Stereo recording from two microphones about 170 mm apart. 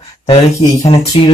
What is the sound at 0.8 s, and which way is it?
Speech, 20° left (ahead or behind).